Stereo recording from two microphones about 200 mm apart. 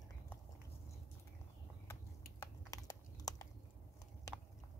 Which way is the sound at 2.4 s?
15° left (ahead or behind).